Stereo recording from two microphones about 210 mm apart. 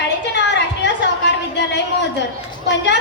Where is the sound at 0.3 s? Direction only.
55° left (ahead or behind).